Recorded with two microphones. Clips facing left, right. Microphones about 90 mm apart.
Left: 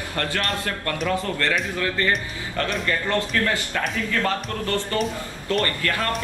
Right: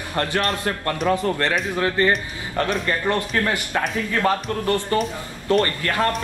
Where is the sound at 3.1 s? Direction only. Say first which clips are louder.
Right 1 dB; 20° right (ahead or behind).